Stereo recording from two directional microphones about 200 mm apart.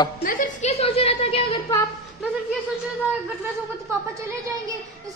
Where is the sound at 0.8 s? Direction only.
30° left (ahead or behind).